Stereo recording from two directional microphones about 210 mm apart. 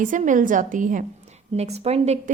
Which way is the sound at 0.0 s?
40° right (ahead or behind).